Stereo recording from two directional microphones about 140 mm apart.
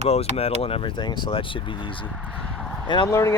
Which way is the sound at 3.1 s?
20° left (ahead or behind).